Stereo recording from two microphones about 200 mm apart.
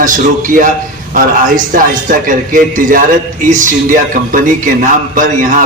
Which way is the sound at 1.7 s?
40° right (ahead or behind).